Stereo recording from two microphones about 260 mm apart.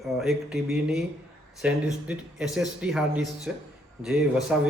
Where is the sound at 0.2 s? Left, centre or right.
Centre.